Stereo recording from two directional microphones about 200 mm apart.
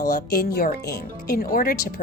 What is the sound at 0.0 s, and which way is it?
Speech, 50° left (ahead or behind).